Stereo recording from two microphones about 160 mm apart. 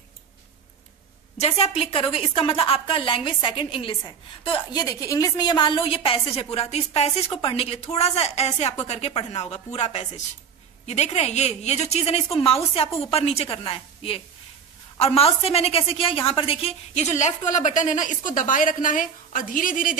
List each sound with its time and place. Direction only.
1.4 s a woman's voice: 35° left (ahead or behind); by 20.0 s 60° left (ahead or behind)